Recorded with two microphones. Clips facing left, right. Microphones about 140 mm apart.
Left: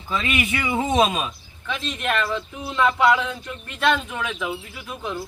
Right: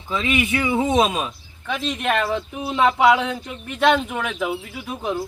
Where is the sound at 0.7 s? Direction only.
5° right (ahead or behind).